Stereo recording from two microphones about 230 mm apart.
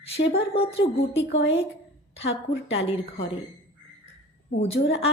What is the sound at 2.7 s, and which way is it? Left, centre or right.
Speech, left.